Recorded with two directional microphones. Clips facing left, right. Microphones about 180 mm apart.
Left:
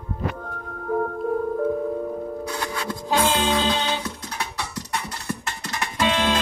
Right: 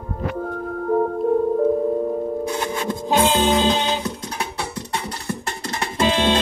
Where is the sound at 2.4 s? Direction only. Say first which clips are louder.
Right 5 dB; 20° right (ahead or behind).